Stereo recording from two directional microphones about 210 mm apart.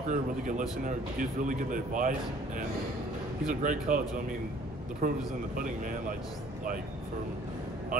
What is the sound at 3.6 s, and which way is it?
Speech, 40° right (ahead or behind).